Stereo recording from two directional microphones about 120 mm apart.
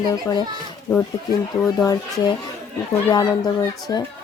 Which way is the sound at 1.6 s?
30° left (ahead or behind).